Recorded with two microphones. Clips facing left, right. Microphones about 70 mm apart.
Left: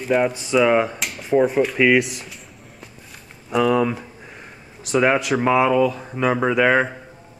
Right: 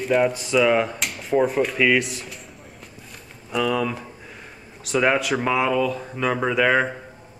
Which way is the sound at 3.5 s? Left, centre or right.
Centre.